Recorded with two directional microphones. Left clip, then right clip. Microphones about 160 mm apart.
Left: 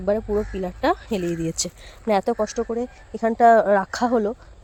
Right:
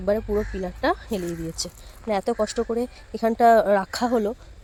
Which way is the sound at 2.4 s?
5° right (ahead or behind).